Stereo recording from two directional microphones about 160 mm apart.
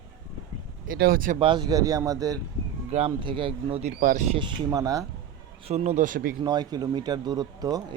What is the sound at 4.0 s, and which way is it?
Speech, 60° right (ahead or behind).